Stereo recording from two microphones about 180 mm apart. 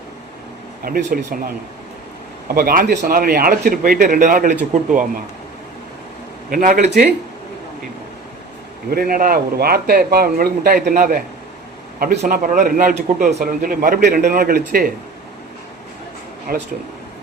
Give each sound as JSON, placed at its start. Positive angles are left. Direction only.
{"t": 0.9, "sound": "a man's voice", "side_deg": -55}
{"t": 2.6, "sound": "a man's voice", "side_deg": -55}
{"t": 6.5, "sound": "a man's voice", "side_deg": -50}
{"t": 8.9, "sound": "a man's voice", "side_deg": -55}
{"t": 16.5, "sound": "a man's voice", "side_deg": -50}